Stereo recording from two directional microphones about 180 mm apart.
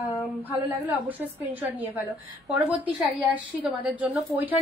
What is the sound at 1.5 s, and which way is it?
A woman's voice, 10° right (ahead or behind).